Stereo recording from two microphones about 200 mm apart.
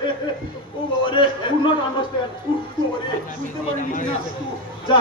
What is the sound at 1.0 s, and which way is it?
Speech, 25° left (ahead or behind).